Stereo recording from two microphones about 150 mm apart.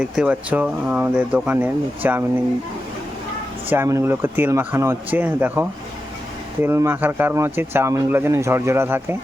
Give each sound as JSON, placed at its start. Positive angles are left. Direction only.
{"t": 0.0, "sound": "speech", "side_deg": -10}
{"t": 3.7, "sound": "speech", "side_deg": -20}